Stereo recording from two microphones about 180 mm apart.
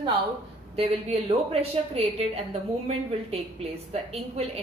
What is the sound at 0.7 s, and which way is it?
A woman's voice, 35° right (ahead or behind).